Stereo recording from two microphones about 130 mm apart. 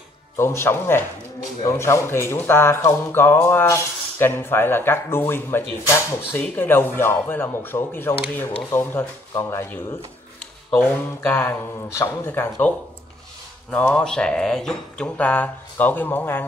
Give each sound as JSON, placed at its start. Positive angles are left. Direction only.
{"t": 0.4, "sound": "speech", "side_deg": 20}